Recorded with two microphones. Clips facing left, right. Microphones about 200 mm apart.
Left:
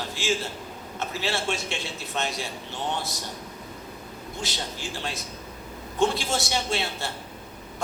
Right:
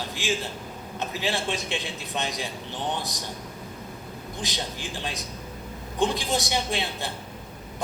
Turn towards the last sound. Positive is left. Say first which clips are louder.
# even
turn(degrees=-15)  # may be behind; listen again after turning